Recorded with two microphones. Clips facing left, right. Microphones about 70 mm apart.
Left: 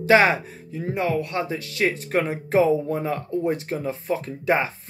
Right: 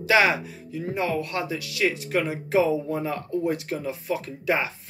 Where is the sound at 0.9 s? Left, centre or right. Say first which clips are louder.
Left 3 dB; left.